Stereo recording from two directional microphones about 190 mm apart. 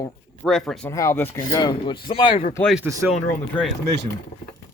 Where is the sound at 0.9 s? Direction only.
15° left (ahead or behind).